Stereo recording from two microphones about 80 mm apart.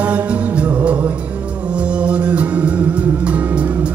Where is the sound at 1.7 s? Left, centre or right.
Centre.